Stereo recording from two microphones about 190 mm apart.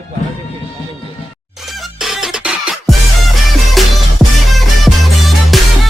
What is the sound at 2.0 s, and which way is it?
Music, centre (ahead or behind).